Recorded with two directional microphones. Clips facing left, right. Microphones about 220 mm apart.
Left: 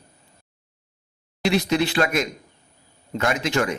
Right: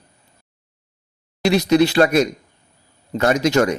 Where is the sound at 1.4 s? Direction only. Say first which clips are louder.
Right 6 dB; 40° right (ahead or behind).